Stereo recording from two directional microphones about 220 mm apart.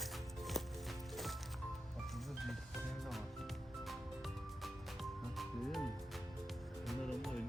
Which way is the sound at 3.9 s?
Centre (ahead or behind).